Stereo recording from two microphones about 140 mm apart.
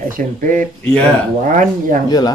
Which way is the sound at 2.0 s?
30° left (ahead or behind).